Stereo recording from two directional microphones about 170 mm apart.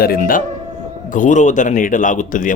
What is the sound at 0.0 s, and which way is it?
Speech, 60° left (ahead or behind).